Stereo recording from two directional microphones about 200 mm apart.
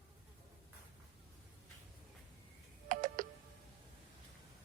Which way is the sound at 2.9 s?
45° right (ahead or behind).